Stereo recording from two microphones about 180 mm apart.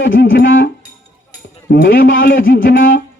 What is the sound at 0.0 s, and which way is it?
Music, 90° left.